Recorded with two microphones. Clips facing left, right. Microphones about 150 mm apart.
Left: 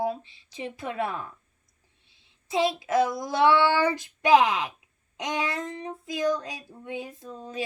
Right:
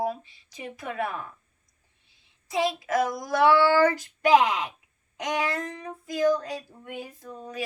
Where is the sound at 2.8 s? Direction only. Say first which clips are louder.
Left 2 dB; 25° left (ahead or behind).